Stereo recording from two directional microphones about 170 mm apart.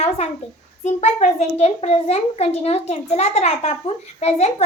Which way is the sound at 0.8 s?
45° left (ahead or behind).